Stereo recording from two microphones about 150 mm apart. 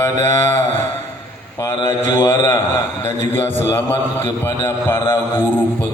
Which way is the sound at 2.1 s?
25° left (ahead or behind).